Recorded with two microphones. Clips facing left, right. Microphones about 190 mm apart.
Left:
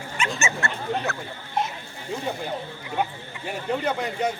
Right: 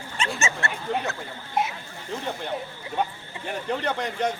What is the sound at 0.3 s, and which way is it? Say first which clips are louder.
Speech: left 1 dB; 30° right (ahead or behind).